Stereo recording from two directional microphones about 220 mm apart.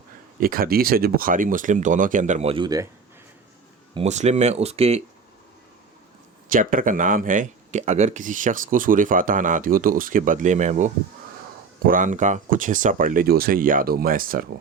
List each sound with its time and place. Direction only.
0.3 s speech: 40° right (ahead or behind); by 2.8 s 20° right (ahead or behind)
3.9 s speech: 30° right (ahead or behind)
6.5 s speech: 40° right (ahead or behind)